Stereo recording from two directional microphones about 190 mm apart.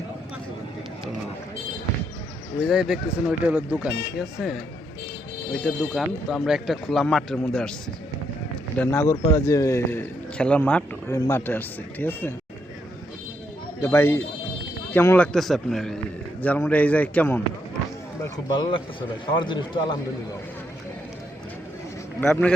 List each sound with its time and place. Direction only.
2.6 s speech: centre (ahead or behind)
8.8 s a man's voice: 10° left (ahead or behind)
13.8 s a man's voice: 10° left (ahead or behind)
18.2 s a man's voice: 20° left (ahead or behind)
22.2 s speech: 5° left (ahead or behind)